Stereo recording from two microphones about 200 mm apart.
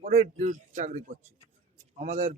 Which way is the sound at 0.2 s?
40° right (ahead or behind).